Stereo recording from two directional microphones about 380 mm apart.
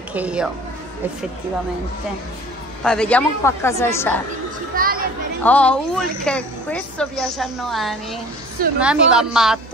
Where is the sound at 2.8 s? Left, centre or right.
Centre.